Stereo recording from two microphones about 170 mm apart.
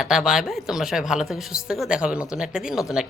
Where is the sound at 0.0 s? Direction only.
5° right (ahead or behind).